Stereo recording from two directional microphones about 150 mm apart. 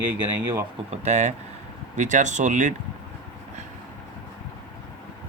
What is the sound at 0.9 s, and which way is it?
Speech, 45° right (ahead or behind).